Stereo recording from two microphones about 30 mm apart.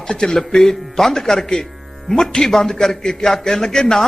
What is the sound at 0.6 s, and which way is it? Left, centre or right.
Speech, centre.